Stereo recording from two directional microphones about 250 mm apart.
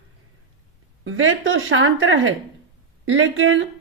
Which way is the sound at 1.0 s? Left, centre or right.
Right.